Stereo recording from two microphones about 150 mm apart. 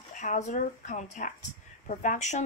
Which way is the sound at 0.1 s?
55° left (ahead or behind).